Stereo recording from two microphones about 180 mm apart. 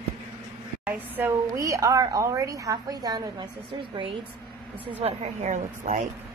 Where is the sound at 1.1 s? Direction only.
15° right (ahead or behind).